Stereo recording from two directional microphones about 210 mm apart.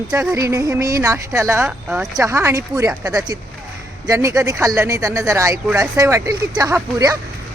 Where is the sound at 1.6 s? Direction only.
5° right (ahead or behind).